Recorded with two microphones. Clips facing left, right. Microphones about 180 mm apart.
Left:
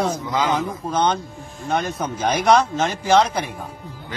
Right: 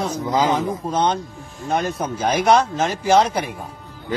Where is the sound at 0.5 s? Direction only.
Centre (ahead or behind).